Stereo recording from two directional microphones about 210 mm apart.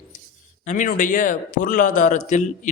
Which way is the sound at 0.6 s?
35° left (ahead or behind).